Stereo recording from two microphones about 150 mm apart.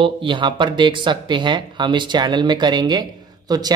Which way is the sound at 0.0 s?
35° right (ahead or behind).